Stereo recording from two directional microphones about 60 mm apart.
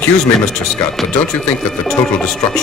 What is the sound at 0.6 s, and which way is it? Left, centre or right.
Speech, centre.